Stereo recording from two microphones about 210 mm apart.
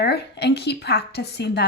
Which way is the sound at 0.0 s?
50° left (ahead or behind).